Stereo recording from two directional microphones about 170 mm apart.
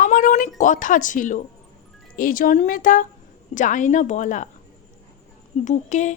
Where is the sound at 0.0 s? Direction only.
50° left (ahead or behind).